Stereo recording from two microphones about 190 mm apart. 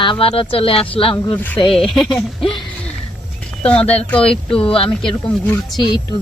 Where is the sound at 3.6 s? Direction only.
5° left (ahead or behind).